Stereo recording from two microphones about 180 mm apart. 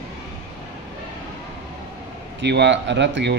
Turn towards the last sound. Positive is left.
turn(degrees=-75)  # may be behind; listen again after turning